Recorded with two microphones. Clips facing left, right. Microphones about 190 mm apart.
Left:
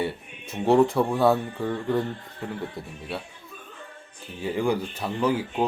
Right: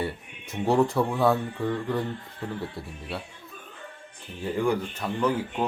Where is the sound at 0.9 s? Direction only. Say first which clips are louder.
Left 2 dB; centre (ahead or behind).